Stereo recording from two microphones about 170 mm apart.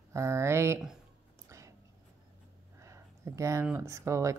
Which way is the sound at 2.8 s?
15° right (ahead or behind).